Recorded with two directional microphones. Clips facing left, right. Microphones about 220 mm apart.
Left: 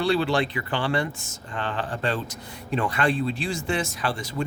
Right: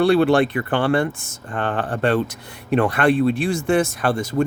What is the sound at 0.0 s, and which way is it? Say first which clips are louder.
Speech: right 8 dB; 55° right (ahead or behind).